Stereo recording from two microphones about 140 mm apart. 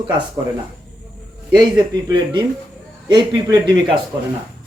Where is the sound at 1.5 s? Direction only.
30° right (ahead or behind).